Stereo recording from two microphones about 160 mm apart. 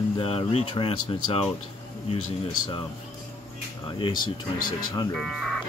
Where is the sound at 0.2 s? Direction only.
35° left (ahead or behind).